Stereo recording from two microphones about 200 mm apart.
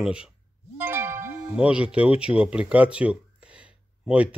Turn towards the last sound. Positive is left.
turn(degrees=-5)  # may be behind; listen again after turning